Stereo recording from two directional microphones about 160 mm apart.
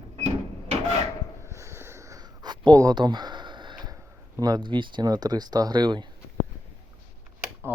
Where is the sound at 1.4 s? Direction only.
15° right (ahead or behind).